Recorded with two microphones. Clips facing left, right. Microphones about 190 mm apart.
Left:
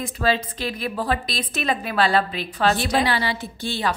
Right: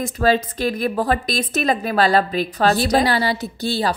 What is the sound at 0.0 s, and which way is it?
A woman's voice, 45° right (ahead or behind).